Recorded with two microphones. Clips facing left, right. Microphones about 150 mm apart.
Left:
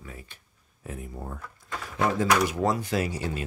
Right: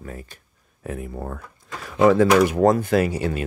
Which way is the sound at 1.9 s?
90° right.